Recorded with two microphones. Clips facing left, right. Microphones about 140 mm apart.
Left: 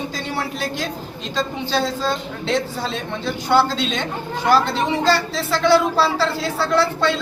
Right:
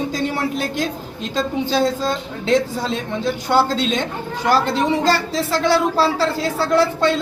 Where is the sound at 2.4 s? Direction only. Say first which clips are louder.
Right 5 dB; 45° right (ahead or behind).